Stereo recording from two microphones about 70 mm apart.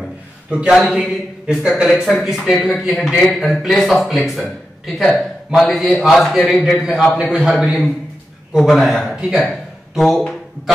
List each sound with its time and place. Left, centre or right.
0.5 s a man's voice: centre
0.7 s a man's voice: centre
9.9 s speech: centre